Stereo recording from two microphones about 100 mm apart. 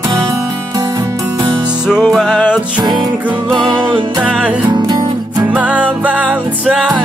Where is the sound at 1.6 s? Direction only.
5° right (ahead or behind).